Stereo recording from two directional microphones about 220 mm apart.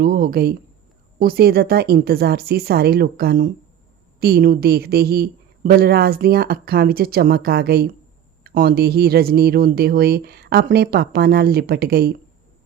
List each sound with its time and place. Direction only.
0.0 s speech: 45° right (ahead or behind)